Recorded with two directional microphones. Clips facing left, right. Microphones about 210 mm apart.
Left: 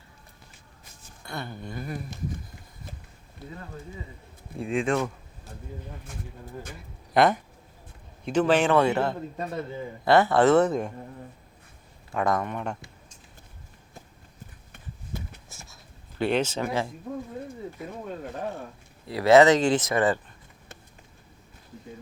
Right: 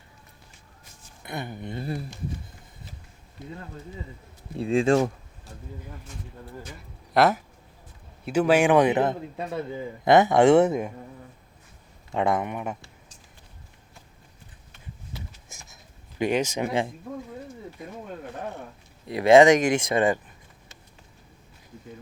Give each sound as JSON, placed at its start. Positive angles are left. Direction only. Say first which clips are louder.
{"t": 1.2, "sound": "speech", "louder": "right 2 dB", "side_deg": -20}
{"t": 4.5, "sound": "speech", "louder": "right 5 dB", "side_deg": -30}
{"t": 7.1, "sound": "a man's voice", "louder": "even", "side_deg": -5}
{"t": 12.1, "sound": "a man's voice", "louder": "right 1 dB", "side_deg": -20}
{"t": 14.7, "sound": "a sound", "louder": "left 4 dB", "side_deg": 55}
{"t": 15.4, "sound": "a sound", "louder": "left 1 dB", "side_deg": -15}
{"t": 19.0, "sound": "a man's voice", "louder": "right 2 dB", "side_deg": -20}